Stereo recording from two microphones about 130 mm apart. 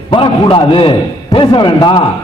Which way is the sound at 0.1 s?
40° left (ahead or behind).